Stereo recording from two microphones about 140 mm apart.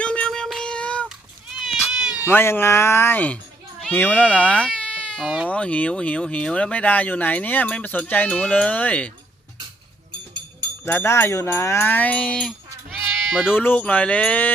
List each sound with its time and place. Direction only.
0.0 s music: 5° left (ahead or behind)
1.5 s cat: 5° right (ahead or behind)
2.2 s speech: 15° left (ahead or behind)
10.8 s speech: 15° left (ahead or behind); by 13.6 s 5° right (ahead or behind)
13.6 s speech: 15° left (ahead or behind)